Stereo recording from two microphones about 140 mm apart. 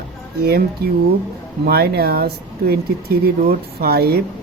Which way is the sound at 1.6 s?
90° right.